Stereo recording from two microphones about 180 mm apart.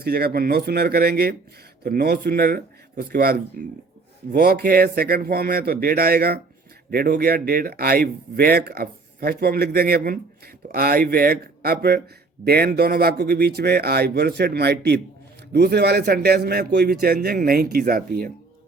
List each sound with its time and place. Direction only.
0.0 s speech: 60° right (ahead or behind)